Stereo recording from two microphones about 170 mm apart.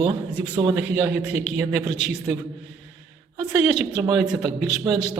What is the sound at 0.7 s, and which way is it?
A man's voice, 5° right (ahead or behind).